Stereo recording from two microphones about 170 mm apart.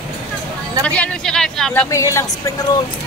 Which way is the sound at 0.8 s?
5° left (ahead or behind).